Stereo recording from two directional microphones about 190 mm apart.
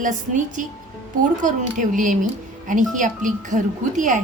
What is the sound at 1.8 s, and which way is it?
A woman's voice, 45° right (ahead or behind).